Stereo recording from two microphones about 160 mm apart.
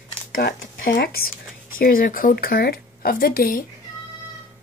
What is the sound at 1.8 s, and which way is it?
A woman's voice, 60° left (ahead or behind).